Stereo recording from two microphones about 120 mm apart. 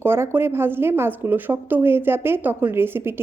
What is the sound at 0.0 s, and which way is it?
A woman's voice, 20° right (ahead or behind).